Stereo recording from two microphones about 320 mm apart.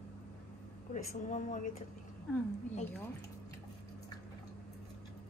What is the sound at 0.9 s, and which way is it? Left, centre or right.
Speech, left.